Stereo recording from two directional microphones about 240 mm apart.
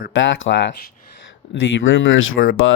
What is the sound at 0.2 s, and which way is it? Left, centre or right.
Speech, left.